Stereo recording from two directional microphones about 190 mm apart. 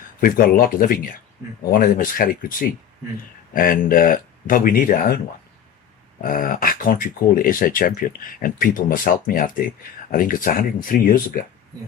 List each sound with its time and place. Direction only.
0.2 s speech: 50° left (ahead or behind)
6.2 s speech: 50° left (ahead or behind)